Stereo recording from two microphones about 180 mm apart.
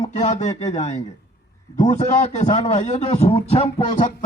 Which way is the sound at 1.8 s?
40° left (ahead or behind).